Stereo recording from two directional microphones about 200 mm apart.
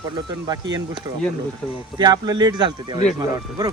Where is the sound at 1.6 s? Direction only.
5° left (ahead or behind).